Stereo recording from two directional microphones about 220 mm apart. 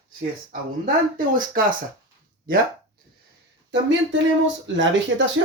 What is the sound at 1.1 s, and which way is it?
Speech, 40° right (ahead or behind).